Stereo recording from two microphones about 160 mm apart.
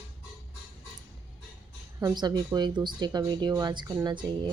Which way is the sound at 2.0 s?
25° right (ahead or behind).